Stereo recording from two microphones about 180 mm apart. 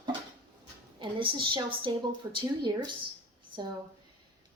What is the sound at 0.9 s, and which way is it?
Speech, 25° right (ahead or behind).